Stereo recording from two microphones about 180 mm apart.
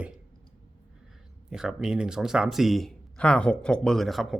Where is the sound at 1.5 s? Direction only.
5° right (ahead or behind).